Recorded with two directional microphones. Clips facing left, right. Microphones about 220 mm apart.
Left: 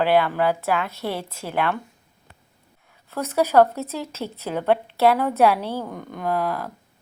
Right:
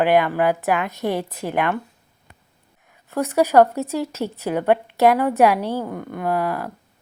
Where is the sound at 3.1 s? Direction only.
15° right (ahead or behind).